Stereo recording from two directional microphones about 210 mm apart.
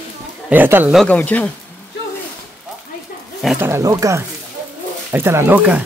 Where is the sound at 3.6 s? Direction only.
10° right (ahead or behind).